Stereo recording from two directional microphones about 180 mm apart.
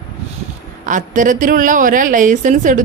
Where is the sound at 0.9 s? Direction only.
45° right (ahead or behind).